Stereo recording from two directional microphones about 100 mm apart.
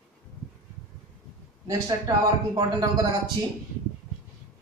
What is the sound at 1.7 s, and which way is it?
Speech, 40° right (ahead or behind).